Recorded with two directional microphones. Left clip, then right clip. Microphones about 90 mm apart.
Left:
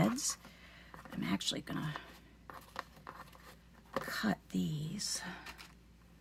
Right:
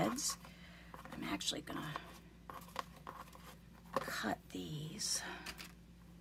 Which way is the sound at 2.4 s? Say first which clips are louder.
Even; 5° left (ahead or behind).